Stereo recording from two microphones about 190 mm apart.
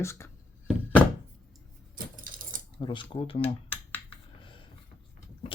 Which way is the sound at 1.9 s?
45° right (ahead or behind).